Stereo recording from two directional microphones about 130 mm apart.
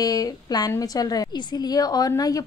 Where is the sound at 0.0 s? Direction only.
30° left (ahead or behind).